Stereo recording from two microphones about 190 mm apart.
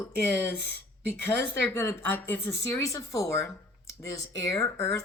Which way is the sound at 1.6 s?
10° left (ahead or behind).